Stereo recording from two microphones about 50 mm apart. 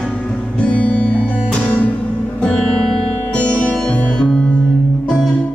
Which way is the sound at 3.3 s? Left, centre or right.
Left.